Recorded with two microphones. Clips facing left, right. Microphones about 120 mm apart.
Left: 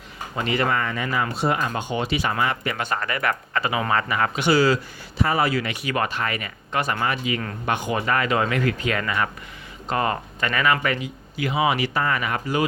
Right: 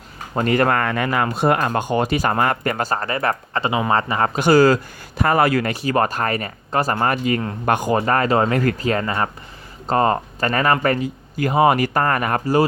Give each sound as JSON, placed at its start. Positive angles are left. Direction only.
{"t": 0.3, "sound": "speech", "side_deg": -50}
{"t": 5.7, "sound": "speech", "side_deg": -35}